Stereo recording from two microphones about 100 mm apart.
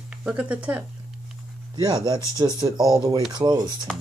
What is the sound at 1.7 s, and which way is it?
Speech, 45° right (ahead or behind).